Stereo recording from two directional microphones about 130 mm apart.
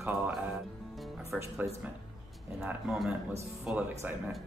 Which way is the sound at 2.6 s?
5° right (ahead or behind).